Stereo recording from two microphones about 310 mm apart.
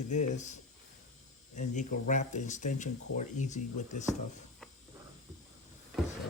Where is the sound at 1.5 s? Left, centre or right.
Left.